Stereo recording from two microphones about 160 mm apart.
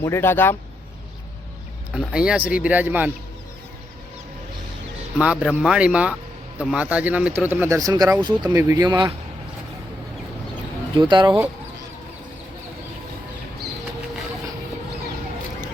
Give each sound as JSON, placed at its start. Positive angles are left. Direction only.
{"t": 0.0, "sound": "a man's voice", "side_deg": 15}
{"t": 2.0, "sound": "speech", "side_deg": -5}
{"t": 5.1, "sound": "speech", "side_deg": -5}
{"t": 7.8, "sound": "speech", "side_deg": -25}
{"t": 10.9, "sound": "speech", "side_deg": -30}